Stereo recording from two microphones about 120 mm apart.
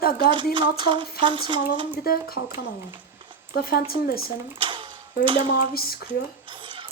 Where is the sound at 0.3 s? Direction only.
40° right (ahead or behind).